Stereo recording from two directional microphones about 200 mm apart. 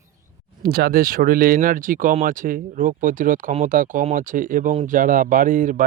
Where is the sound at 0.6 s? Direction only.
50° right (ahead or behind).